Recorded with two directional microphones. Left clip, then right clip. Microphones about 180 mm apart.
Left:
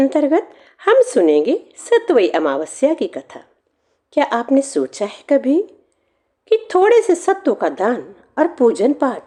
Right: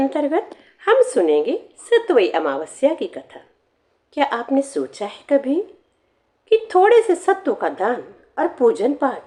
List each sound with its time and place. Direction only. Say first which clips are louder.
0.0 s a woman's voice: left 5 dB; 35° left (ahead or behind)